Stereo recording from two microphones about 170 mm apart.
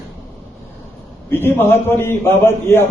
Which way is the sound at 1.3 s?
15° left (ahead or behind).